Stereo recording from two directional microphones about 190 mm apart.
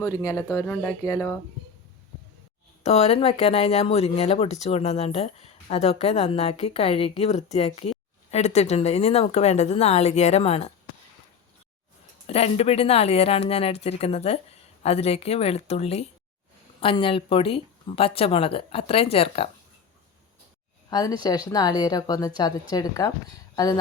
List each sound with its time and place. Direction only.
0.0 s speech: 20° left (ahead or behind)
2.8 s speech: 35° left (ahead or behind)
12.3 s speech: 35° left (ahead or behind)
20.9 s speech: 20° left (ahead or behind)